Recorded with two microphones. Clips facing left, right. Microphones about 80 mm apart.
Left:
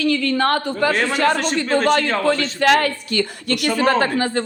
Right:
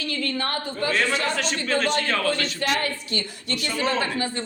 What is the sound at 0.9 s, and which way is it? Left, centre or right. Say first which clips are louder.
A man's voice: left 6 dB; left.